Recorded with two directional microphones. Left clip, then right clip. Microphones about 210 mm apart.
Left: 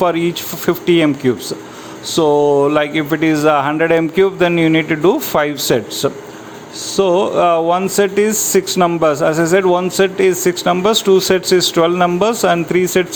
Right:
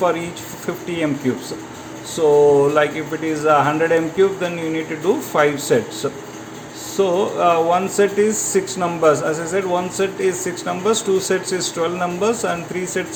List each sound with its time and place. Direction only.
0.0 s speech: 45° left (ahead or behind)
2.1 s speech: 45° left (ahead or behind)